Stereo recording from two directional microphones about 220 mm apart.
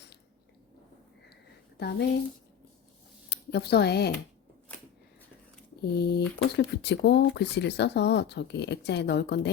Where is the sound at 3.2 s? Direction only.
50° left (ahead or behind).